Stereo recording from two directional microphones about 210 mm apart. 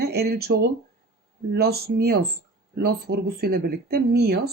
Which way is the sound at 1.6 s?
50° right (ahead or behind).